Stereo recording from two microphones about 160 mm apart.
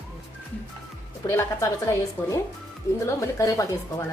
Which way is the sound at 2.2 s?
15° left (ahead or behind).